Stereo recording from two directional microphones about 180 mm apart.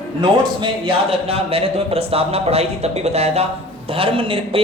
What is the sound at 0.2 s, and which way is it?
A man's voice, 25° right (ahead or behind).